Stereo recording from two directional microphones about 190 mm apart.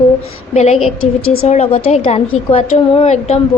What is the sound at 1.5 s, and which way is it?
A woman's voice, 35° left (ahead or behind).